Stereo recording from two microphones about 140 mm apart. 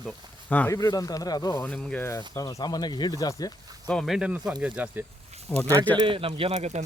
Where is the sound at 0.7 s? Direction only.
25° left (ahead or behind).